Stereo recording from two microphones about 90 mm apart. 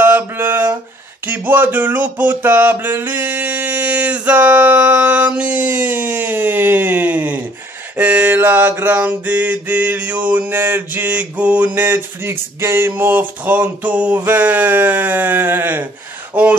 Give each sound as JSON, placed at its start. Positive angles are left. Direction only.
{"t": 0.0, "sound": "mantra", "side_deg": -20}
{"t": 1.2, "sound": "a sound", "side_deg": -20}
{"t": 8.0, "sound": "mantra", "side_deg": -20}